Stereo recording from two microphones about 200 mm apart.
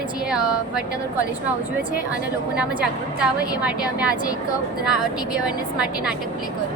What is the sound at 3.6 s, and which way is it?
Speech, 5° right (ahead or behind).